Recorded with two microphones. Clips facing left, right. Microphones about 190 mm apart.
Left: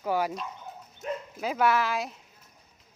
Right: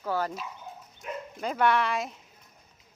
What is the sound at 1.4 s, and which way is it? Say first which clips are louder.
Speech: even; 5° left (ahead or behind).